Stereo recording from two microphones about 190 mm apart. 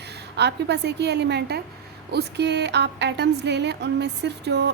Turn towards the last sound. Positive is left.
turn(degrees=-60)  # may be behind; listen again after turning